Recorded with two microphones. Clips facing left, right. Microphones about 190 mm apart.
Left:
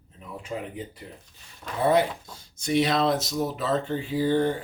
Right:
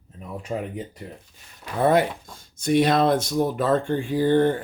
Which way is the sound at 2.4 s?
50° right (ahead or behind).